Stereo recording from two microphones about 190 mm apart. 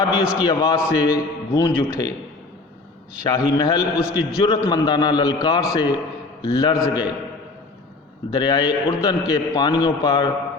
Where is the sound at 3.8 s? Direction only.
5° right (ahead or behind).